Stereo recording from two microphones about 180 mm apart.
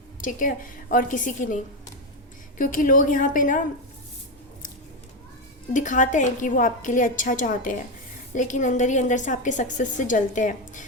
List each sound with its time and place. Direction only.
0.2 s a woman's voice: 45° left (ahead or behind)
2.6 s a woman's voice: 50° left (ahead or behind)
5.7 s a woman's voice: 45° left (ahead or behind)